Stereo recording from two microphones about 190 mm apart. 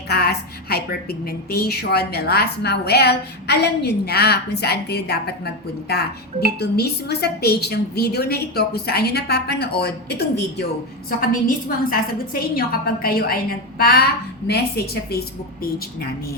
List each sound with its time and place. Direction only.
0.1 s speech: 55° left (ahead or behind)
11.2 s a woman's voice: 45° left (ahead or behind)